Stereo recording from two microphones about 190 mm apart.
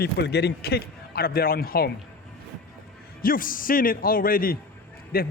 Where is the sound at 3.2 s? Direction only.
45° left (ahead or behind).